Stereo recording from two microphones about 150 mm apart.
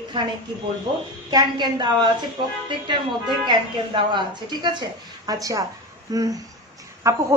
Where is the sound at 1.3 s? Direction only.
30° right (ahead or behind).